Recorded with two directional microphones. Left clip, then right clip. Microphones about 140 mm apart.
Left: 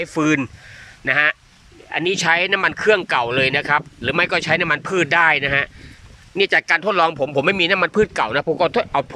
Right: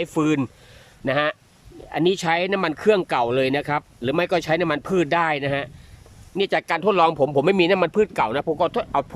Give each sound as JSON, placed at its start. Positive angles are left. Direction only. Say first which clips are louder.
{"t": 0.0, "sound": "speech", "louder": "left 3 dB", "side_deg": -25}
{"t": 7.9, "sound": "speech", "louder": "left 2 dB", "side_deg": -15}